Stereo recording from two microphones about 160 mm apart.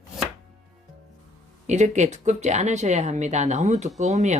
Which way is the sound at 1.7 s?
45° right (ahead or behind).